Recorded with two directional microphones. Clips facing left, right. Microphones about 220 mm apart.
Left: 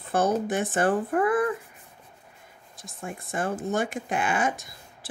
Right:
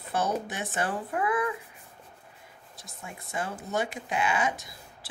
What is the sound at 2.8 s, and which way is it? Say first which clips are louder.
Speech: left 7 dB; 50° left (ahead or behind).